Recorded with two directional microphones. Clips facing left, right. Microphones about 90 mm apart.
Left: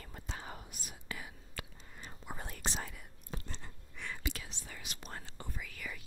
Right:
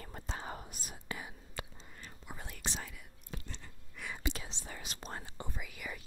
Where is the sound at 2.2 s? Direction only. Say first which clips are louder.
Left 2 dB; 45° left (ahead or behind).